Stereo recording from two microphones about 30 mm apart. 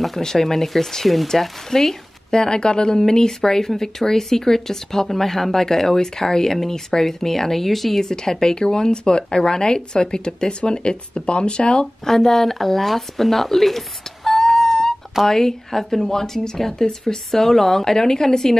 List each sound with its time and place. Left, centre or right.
0.2 s speech: centre
1.0 s speech: centre
1.7 s speech: centre
8.0 s speech: left
11.8 s speech: centre